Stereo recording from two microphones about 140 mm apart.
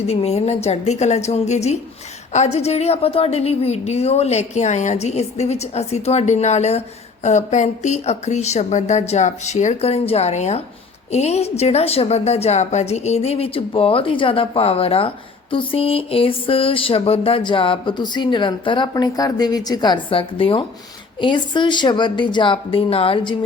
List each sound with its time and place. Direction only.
0.1 s a woman's voice: 50° left (ahead or behind)